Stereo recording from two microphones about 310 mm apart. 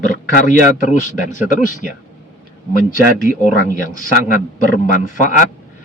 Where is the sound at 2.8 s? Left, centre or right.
Left.